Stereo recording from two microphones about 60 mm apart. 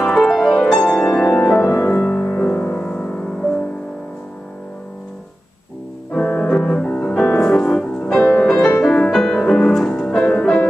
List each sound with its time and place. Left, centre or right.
0.0 s music: centre
0.3 s music: centre
0.7 s music: centre
1.6 s music: left
1.9 s music: left
6.1 s music: centre
9.1 s music: centre